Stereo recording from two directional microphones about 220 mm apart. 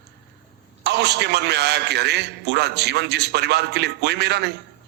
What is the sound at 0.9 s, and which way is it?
A man's voice, 50° right (ahead or behind).